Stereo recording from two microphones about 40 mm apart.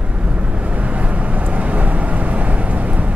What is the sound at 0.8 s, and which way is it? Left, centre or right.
Vehicle, right.